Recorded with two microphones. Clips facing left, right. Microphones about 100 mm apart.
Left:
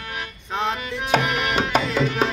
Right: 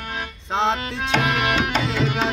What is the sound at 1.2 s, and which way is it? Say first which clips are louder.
Tabla: right 2 dB; 90° right.